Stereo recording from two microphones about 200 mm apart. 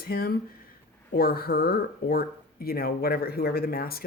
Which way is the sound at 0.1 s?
50° left (ahead or behind).